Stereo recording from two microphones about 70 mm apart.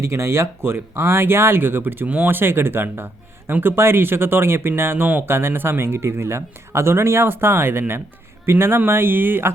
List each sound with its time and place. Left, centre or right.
0.0 s speech: right